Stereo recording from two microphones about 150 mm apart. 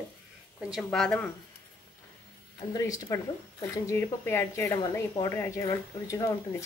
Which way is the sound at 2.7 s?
25° left (ahead or behind).